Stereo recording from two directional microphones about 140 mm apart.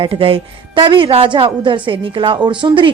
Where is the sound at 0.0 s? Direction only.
40° right (ahead or behind).